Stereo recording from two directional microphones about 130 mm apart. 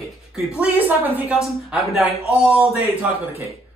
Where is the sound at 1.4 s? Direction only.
Centre (ahead or behind).